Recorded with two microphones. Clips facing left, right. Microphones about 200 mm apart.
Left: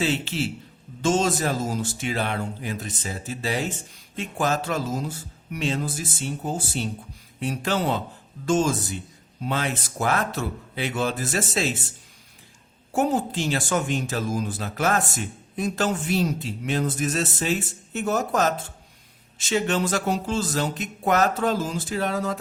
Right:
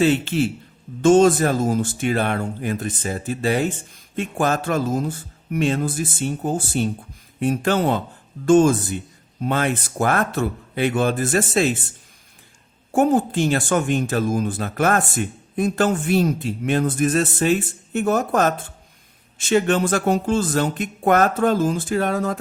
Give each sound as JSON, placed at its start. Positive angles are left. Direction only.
{"t": 0.0, "sound": "speech", "side_deg": -55}
{"t": 12.9, "sound": "speech", "side_deg": -55}